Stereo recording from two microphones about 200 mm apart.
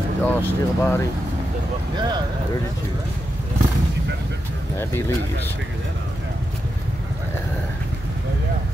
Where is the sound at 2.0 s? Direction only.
20° right (ahead or behind).